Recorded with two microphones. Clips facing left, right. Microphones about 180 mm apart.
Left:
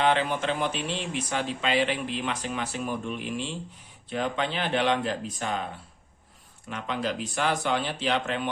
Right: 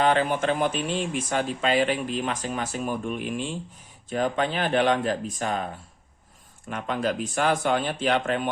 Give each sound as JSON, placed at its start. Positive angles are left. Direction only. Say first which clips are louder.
{"t": 0.0, "sound": "speech", "louder": "right 3 dB", "side_deg": -45}
{"t": 6.7, "sound": "speech", "louder": "right 3 dB", "side_deg": -50}